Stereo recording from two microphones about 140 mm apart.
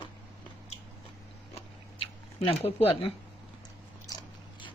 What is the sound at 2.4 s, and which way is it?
Speech, 45° left (ahead or behind).